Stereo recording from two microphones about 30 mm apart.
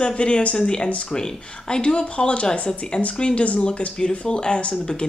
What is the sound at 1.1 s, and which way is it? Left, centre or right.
Speech, left.